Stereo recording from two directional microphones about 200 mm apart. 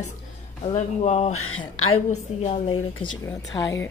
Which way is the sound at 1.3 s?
90° left.